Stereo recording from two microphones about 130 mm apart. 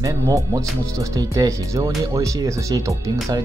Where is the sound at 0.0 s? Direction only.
25° right (ahead or behind).